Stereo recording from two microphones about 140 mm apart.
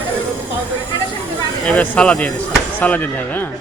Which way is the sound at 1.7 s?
10° left (ahead or behind).